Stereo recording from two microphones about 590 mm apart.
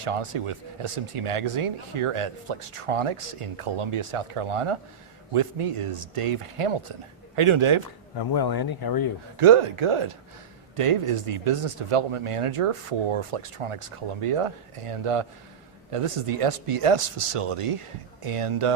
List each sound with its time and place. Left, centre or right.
0.0 s speech: right
8.2 s speech: left
9.4 s speech: right